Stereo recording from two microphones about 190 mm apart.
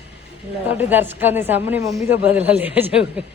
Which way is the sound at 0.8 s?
10° right (ahead or behind).